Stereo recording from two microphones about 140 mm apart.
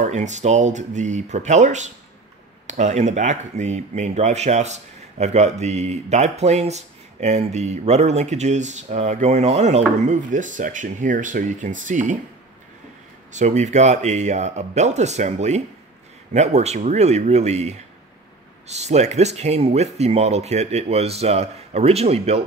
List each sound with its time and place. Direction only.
0.0 s speech: 60° right (ahead or behind)
13.3 s speech: 60° right (ahead or behind)